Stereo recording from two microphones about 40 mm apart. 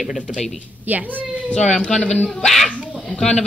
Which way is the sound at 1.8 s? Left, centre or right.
Centre.